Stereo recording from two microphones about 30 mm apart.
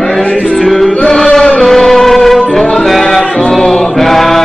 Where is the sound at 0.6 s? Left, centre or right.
Centre.